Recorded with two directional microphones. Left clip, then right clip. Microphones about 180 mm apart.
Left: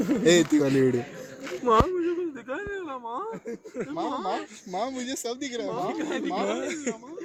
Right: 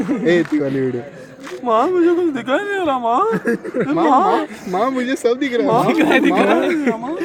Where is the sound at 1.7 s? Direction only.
35° right (ahead or behind).